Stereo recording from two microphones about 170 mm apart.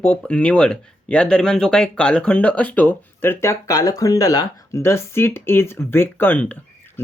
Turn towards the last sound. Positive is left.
turn(degrees=10)  # may be behind; listen again after turning